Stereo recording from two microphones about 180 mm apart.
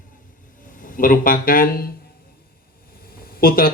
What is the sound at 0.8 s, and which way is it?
Speech, 50° left (ahead or behind).